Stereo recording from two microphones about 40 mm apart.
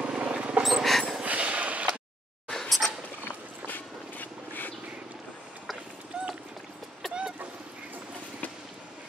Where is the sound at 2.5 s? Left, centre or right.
Centre.